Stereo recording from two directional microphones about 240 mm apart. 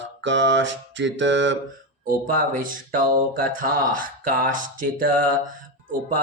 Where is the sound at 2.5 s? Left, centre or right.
Right.